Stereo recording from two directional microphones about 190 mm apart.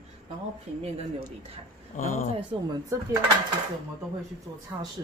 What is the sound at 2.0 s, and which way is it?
Speech, 45° left (ahead or behind).